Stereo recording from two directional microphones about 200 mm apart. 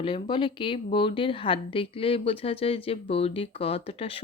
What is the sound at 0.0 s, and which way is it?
Speech, 25° left (ahead or behind).